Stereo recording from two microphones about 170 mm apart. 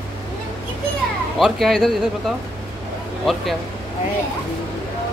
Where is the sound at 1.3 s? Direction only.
Centre (ahead or behind).